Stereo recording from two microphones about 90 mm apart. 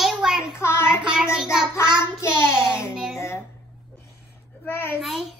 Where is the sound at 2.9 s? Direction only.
10° right (ahead or behind).